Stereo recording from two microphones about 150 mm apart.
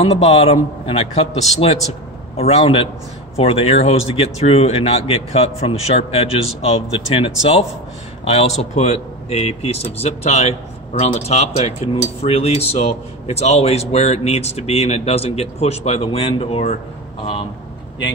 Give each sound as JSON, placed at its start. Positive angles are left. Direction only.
{"t": 0.0, "sound": "a man's voice", "side_deg": 45}